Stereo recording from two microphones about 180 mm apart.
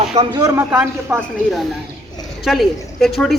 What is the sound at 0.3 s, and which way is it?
Speech, 15° right (ahead or behind).